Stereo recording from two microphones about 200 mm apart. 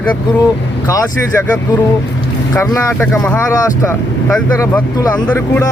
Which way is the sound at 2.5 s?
15° left (ahead or behind).